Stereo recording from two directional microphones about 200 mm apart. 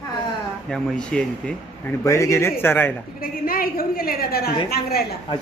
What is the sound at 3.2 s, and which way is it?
A woman's voice, 45° left (ahead or behind).